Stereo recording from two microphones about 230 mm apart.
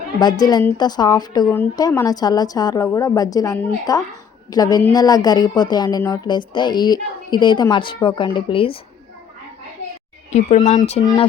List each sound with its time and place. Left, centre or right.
0.2 s a woman's voice: centre
10.3 s speech: left